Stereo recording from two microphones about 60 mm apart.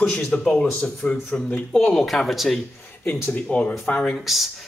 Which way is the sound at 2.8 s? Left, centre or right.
Left.